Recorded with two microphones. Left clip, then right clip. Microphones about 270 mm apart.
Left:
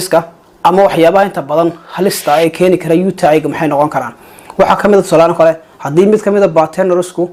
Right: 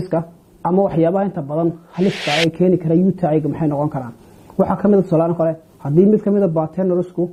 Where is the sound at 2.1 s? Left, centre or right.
Centre.